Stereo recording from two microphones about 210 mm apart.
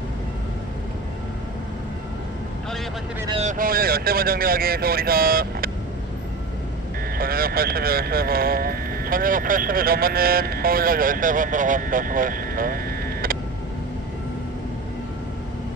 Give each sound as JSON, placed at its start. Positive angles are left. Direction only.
{"t": 3.3, "sound": "speech", "side_deg": -30}
{"t": 3.5, "sound": "speech", "side_deg": -45}
{"t": 7.2, "sound": "speech", "side_deg": -45}